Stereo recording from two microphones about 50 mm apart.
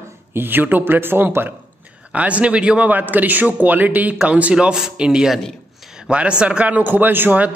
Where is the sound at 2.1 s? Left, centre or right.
Right.